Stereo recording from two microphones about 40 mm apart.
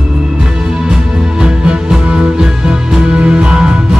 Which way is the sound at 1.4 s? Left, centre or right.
Centre.